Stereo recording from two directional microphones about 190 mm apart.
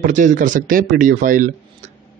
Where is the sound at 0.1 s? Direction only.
40° right (ahead or behind).